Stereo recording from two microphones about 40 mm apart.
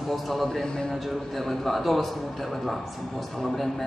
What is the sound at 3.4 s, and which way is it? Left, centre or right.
Speech, centre.